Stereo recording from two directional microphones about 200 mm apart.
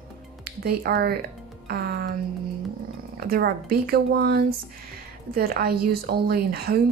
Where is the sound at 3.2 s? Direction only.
50° right (ahead or behind).